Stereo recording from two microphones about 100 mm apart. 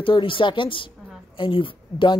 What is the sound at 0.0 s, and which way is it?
A woman's voice, 55° left (ahead or behind).